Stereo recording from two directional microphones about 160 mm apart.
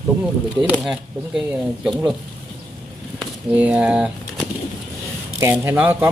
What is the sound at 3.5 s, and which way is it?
Speech, 10° right (ahead or behind).